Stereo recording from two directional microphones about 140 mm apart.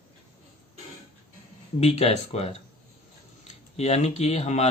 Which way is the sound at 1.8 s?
45° left (ahead or behind).